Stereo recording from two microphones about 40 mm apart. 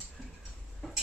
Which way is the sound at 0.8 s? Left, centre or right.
Centre.